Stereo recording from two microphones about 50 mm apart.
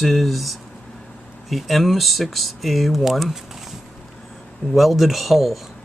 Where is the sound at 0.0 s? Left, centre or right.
Centre.